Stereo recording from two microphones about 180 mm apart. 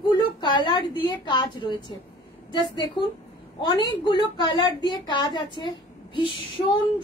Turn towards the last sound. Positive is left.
turn(degrees=30)  # may be behind; listen again after turning